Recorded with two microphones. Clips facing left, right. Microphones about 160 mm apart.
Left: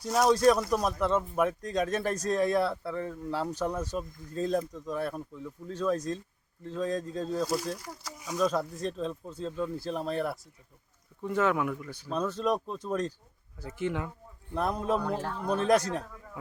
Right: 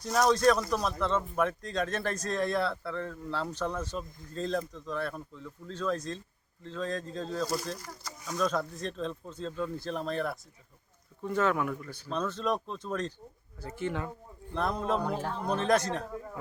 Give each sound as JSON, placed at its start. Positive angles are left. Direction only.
{"t": 0.0, "sound": "speech", "side_deg": 5}
{"t": 15.0, "sound": "speech", "side_deg": -15}
{"t": 15.4, "sound": "speech", "side_deg": 10}